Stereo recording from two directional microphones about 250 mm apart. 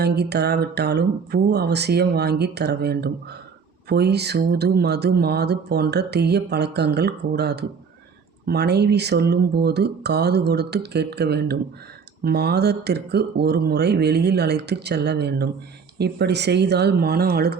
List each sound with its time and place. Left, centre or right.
0.0 s speech: right